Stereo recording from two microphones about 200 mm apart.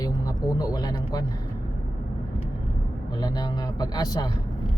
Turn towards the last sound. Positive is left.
turn(degrees=20)  # may be behind; listen again after turning